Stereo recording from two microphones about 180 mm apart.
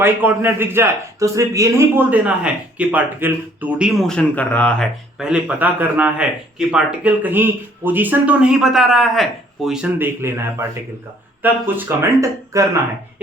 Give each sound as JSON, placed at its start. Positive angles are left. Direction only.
{"t": 0.0, "sound": "a man's voice", "side_deg": -10}